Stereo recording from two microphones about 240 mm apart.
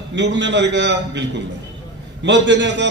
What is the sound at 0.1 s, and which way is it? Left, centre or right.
A man's voice, right.